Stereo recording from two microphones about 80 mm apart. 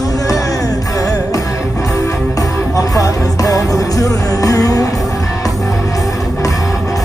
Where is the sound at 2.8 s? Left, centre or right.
Left.